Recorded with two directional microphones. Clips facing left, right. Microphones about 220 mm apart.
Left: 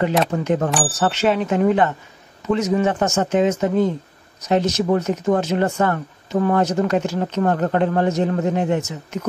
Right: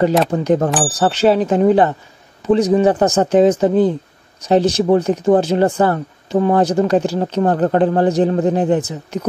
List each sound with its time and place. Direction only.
0.3 s speech: 35° right (ahead or behind)